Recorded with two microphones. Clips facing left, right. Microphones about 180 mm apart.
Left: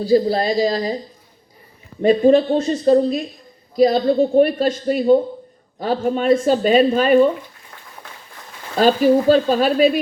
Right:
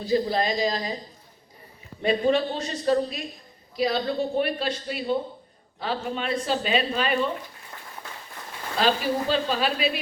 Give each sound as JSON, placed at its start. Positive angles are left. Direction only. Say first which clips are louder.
{"t": 0.0, "sound": "speech", "louder": "left 7 dB", "side_deg": 35}
{"t": 2.0, "sound": "speech", "louder": "left 9 dB", "side_deg": 40}
{"t": 8.8, "sound": "speech", "louder": "left 10 dB", "side_deg": 45}